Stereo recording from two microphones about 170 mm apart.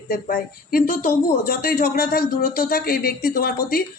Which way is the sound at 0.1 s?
55° left (ahead or behind).